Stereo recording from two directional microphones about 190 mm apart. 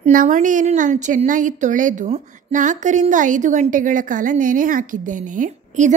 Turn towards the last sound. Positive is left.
turn(degrees=-40)  # may be behind; listen again after turning